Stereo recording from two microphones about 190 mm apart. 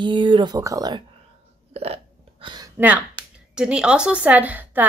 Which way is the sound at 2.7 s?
10° right (ahead or behind).